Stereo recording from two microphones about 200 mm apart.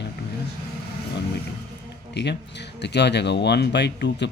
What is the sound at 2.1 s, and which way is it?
Speech, 60° left (ahead or behind).